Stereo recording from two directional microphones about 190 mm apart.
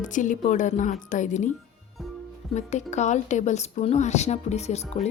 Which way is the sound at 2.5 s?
35° left (ahead or behind).